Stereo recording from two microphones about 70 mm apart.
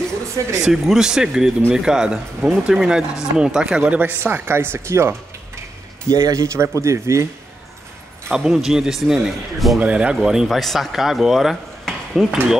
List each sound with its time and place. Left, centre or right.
0.6 s speech: centre
4.0 s speech: right
6.0 s speech: right
8.3 s a man's voice: centre
9.8 s speech: centre